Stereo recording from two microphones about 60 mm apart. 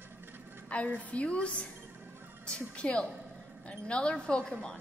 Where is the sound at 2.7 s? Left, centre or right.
Centre.